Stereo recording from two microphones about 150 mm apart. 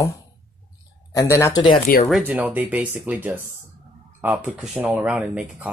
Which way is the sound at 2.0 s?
5° right (ahead or behind).